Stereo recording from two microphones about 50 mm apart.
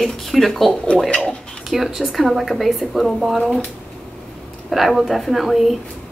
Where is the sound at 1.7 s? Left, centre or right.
Centre.